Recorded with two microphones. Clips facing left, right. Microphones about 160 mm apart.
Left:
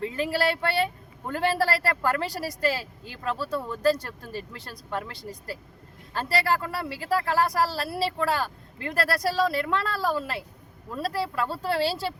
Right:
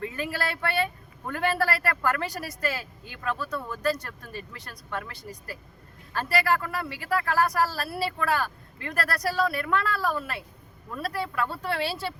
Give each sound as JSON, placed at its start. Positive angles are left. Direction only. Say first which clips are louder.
{"t": 0.0, "sound": "speech", "louder": "left 5 dB", "side_deg": 30}